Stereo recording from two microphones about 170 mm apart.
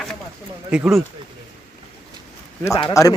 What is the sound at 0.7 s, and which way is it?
Speech, 5° right (ahead or behind).